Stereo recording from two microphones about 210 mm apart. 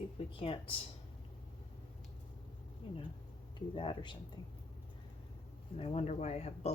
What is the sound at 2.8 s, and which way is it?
Speech, 25° left (ahead or behind).